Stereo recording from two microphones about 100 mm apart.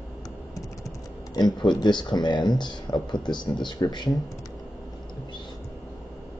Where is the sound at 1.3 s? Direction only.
45° left (ahead or behind).